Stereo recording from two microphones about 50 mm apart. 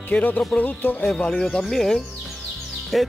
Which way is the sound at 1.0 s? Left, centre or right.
Centre.